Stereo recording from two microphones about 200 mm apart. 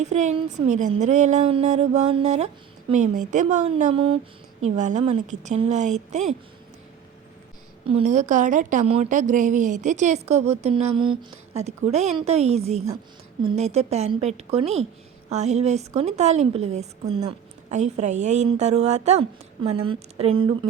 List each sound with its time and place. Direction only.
0.0 s a woman's voice: 35° right (ahead or behind)
7.9 s a woman's voice: 30° right (ahead or behind)